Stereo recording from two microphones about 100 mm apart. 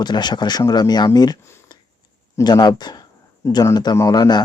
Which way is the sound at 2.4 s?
45° left (ahead or behind).